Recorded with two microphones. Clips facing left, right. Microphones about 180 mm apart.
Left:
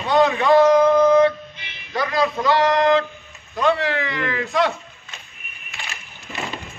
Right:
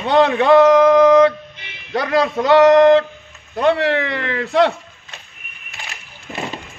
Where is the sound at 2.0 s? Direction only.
65° right (ahead or behind).